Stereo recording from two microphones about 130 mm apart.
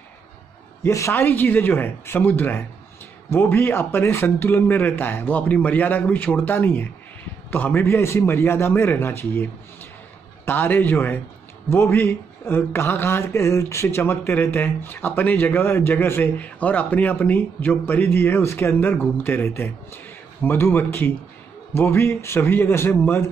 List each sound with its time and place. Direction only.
0.8 s speech: 25° left (ahead or behind)